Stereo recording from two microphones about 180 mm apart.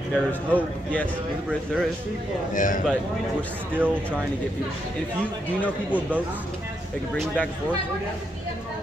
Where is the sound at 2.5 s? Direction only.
50° left (ahead or behind).